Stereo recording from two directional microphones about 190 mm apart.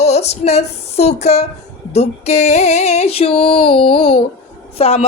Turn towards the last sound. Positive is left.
turn(degrees=30)  # may be behind; listen again after turning